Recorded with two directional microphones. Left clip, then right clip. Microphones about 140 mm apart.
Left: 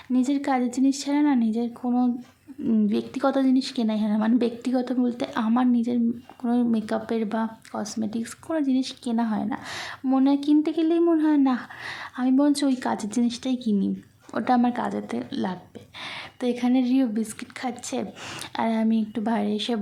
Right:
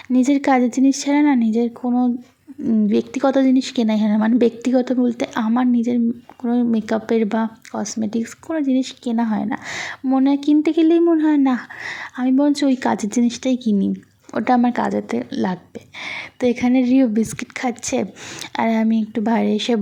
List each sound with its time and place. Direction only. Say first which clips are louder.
0.1 s a woman's voice: right 8 dB; 35° right (ahead or behind)
12.8 s a woman's voice: right 7 dB; 30° right (ahead or behind)